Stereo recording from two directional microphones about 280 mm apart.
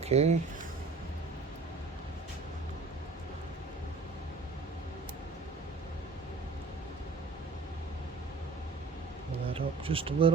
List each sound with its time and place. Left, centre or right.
0.0 s speech: right
9.5 s speech: centre